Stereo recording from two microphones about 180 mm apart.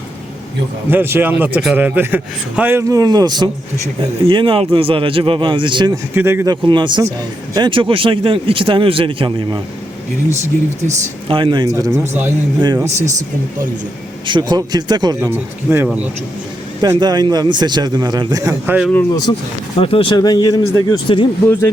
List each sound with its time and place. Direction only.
0.9 s a man's voice: 10° right (ahead or behind)
6.1 s speech: 15° right (ahead or behind)
10.8 s a man's voice: 30° right (ahead or behind)
14.3 s speech: 25° right (ahead or behind)
19.3 s speech: 25° left (ahead or behind)